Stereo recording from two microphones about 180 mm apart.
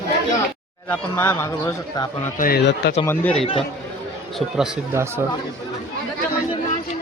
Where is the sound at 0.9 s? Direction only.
15° left (ahead or behind).